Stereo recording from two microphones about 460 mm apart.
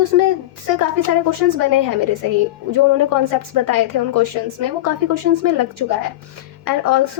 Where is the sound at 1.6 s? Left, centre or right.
Right.